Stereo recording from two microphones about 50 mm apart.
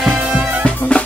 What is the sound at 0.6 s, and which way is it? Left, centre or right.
Music, left.